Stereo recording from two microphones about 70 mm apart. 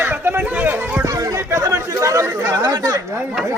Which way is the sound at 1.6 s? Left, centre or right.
Right.